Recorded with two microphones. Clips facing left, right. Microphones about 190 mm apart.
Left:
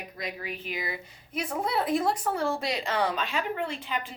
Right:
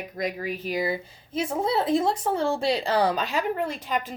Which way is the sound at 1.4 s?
25° right (ahead or behind).